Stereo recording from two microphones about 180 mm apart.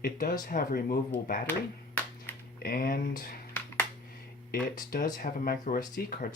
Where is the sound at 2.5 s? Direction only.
55° left (ahead or behind).